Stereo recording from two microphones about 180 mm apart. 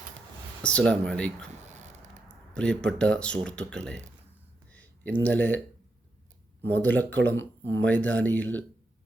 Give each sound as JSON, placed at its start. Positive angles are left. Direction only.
{"t": 0.6, "sound": "speech", "side_deg": 5}
{"t": 1.6, "sound": "a sound", "side_deg": -40}
{"t": 2.6, "sound": "speech", "side_deg": 5}
{"t": 4.7, "sound": "a sound", "side_deg": 10}
{"t": 5.2, "sound": "speech", "side_deg": 10}
{"t": 6.7, "sound": "speech", "side_deg": 10}